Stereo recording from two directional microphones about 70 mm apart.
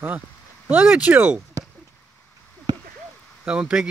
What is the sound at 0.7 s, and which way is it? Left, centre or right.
Speech, centre.